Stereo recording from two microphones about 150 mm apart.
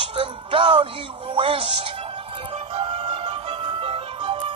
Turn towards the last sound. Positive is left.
turn(degrees=-35)  # may be behind; listen again after turning